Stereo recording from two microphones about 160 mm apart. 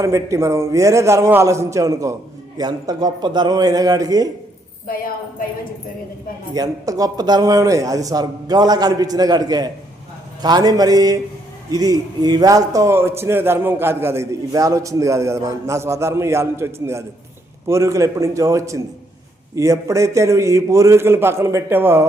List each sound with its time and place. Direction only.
0.0 s a man's voice: 20° right (ahead or behind)
6.5 s a man's voice: 20° right (ahead or behind)
17.7 s a man's voice: 20° right (ahead or behind)